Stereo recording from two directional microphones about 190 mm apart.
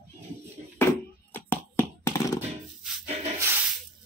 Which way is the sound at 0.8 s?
10° left (ahead or behind).